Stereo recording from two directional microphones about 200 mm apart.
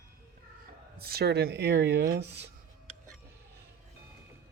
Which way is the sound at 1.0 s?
50° right (ahead or behind).